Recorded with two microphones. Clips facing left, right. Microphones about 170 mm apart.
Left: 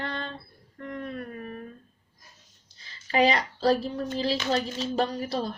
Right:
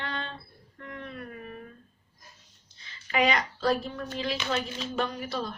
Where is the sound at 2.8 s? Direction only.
35° left (ahead or behind).